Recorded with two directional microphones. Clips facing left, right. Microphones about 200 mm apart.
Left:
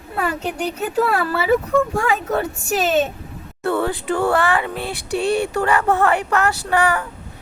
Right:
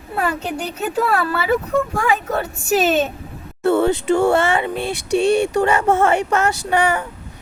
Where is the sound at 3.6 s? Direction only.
25° right (ahead or behind).